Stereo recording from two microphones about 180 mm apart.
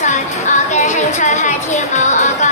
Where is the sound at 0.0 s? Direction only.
40° left (ahead or behind).